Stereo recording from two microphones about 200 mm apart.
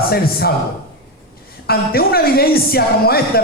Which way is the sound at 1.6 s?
50° left (ahead or behind).